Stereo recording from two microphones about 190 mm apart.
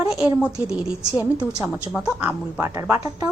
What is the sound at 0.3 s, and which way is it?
A woman's voice, 5° right (ahead or behind).